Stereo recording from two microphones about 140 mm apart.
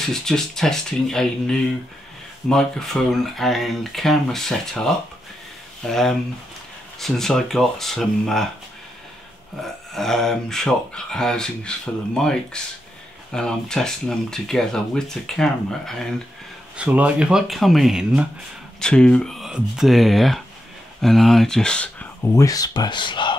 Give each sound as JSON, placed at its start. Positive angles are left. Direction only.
{"t": 0.1, "sound": "speech", "side_deg": 5}
{"t": 9.6, "sound": "speech", "side_deg": 0}
{"t": 16.7, "sound": "speech", "side_deg": -10}
{"t": 22.3, "sound": "speech", "side_deg": 25}